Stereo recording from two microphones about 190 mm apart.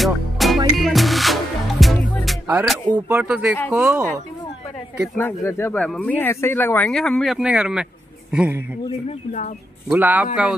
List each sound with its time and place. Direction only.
0.0 s music: centre (ahead or behind)
2.4 s speech: 5° right (ahead or behind)
2.9 s speech: 25° right (ahead or behind)
3.2 s speech: 5° right (ahead or behind)
5.1 s speech: 10° left (ahead or behind); by 8.6 s 10° right (ahead or behind)
9.8 s speech: 10° right (ahead or behind)